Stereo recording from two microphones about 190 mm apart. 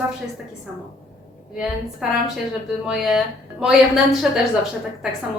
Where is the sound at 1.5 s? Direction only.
Centre (ahead or behind).